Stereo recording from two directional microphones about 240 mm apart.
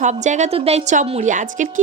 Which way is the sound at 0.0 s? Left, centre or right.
Right.